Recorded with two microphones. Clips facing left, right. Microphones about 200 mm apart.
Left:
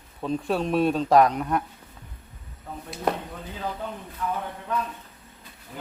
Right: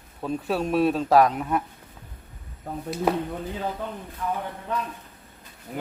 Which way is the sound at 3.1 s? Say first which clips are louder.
Right 2 dB; 5° right (ahead or behind).